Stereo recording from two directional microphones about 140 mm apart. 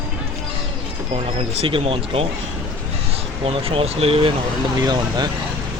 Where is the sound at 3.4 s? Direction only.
45° right (ahead or behind).